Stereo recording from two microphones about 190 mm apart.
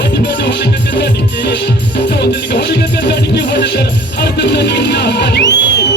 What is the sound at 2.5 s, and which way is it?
Music, 65° left (ahead or behind).